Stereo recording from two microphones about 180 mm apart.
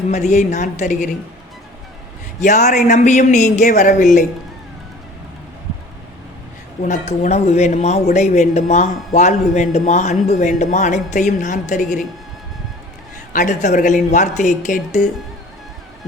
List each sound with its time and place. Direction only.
0.1 s a man's voice: 40° left (ahead or behind)
2.4 s a man's voice: 40° left (ahead or behind)
6.8 s a man's voice: 40° left (ahead or behind)
13.3 s a man's voice: 45° left (ahead or behind)